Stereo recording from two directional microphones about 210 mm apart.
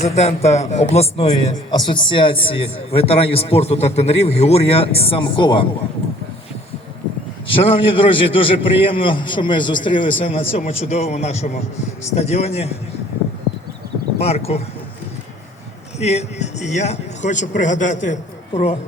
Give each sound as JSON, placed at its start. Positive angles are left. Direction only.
{"t": 0.0, "sound": "a man's voice", "side_deg": 30}
{"t": 7.4, "sound": "a man's voice", "side_deg": 25}
{"t": 14.2, "sound": "a man's voice", "side_deg": 30}
{"t": 16.0, "sound": "speech", "side_deg": 30}